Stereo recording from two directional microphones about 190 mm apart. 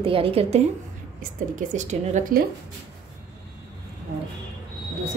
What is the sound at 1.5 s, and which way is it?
Speech, 40° right (ahead or behind).